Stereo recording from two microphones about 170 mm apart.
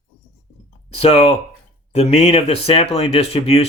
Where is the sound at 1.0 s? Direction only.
35° left (ahead or behind).